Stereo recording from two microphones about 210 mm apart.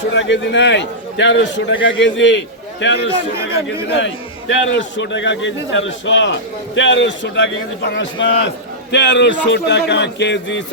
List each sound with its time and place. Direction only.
0.0 s a man's voice: 60° left (ahead or behind)